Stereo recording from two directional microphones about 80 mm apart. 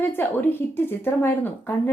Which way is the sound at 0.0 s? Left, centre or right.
Left.